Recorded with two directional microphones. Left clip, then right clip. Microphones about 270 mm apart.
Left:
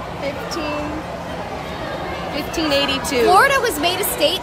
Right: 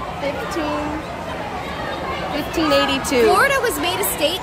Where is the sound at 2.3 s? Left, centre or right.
Right.